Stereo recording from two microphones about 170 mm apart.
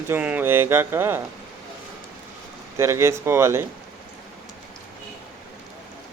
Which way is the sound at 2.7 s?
15° right (ahead or behind).